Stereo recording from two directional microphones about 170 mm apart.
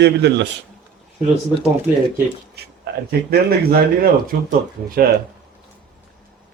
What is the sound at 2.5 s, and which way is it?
Speech, 65° right (ahead or behind).